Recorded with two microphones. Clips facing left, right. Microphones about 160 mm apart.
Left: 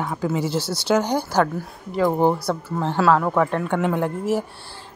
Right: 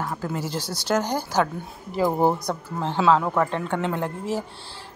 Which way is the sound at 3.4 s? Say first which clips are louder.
Left 4 dB; 10° left (ahead or behind).